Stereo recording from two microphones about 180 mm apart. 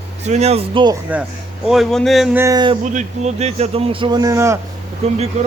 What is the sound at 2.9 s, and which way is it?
A man's voice, 40° right (ahead or behind).